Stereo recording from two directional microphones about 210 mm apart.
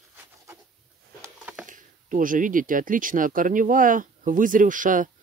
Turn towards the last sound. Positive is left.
turn(degrees=-40)  # may be behind; listen again after turning